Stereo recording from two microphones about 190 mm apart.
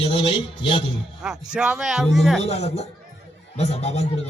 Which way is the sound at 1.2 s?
5° right (ahead or behind).